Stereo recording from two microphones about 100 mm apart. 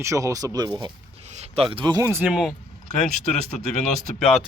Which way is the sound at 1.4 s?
70° right (ahead or behind).